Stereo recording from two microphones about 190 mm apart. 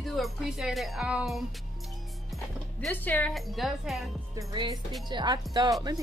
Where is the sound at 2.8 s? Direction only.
10° left (ahead or behind).